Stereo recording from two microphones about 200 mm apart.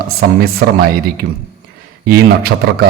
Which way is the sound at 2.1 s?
50° right (ahead or behind).